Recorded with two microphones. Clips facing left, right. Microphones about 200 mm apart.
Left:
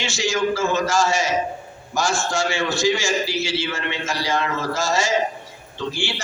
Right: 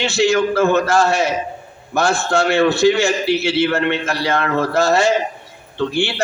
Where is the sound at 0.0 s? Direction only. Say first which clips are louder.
Right 7 dB; 60° right (ahead or behind).